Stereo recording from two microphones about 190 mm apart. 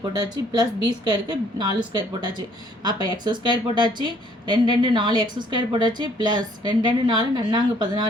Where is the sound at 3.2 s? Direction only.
25° right (ahead or behind).